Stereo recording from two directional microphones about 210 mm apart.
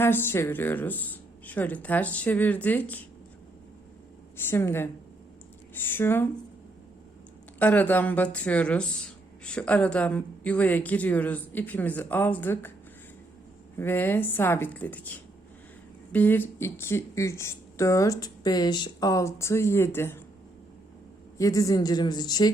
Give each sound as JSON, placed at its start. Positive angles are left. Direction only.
{"t": 0.0, "sound": "speech", "side_deg": 10}
{"t": 4.4, "sound": "speech", "side_deg": 10}
{"t": 7.6, "sound": "speech", "side_deg": 10}
{"t": 13.7, "sound": "speech", "side_deg": 10}
{"t": 16.1, "sound": "speech", "side_deg": 10}
{"t": 21.3, "sound": "a woman's voice", "side_deg": 15}